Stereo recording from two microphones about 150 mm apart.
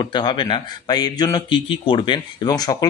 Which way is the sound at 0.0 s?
30° left (ahead or behind).